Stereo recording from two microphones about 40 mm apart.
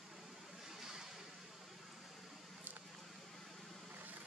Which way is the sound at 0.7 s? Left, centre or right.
Centre.